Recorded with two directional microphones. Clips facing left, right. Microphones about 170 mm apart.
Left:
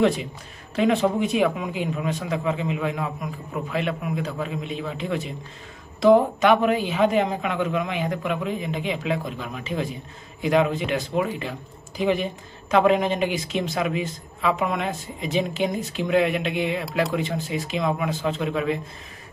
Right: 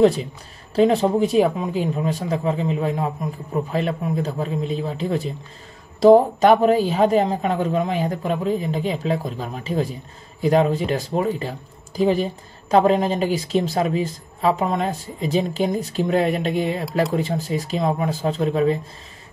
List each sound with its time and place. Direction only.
0.0 s speech: 35° right (ahead or behind)